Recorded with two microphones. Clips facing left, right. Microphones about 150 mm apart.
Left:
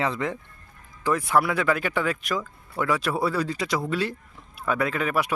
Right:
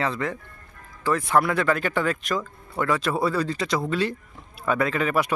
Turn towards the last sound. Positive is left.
turn(degrees=5)  # may be behind; listen again after turning